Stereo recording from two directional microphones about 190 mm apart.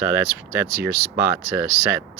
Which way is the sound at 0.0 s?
10° right (ahead or behind).